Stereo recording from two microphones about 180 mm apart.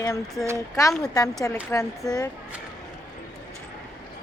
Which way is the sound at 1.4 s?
15° left (ahead or behind).